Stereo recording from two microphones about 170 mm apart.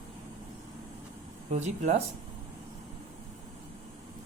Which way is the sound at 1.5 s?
40° right (ahead or behind).